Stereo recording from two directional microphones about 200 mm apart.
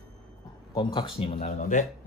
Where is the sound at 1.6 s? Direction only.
40° left (ahead or behind).